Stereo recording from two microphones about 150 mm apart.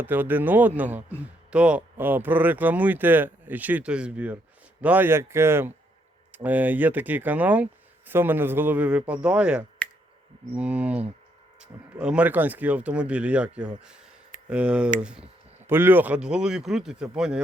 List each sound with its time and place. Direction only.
0.0 s speech: 10° right (ahead or behind)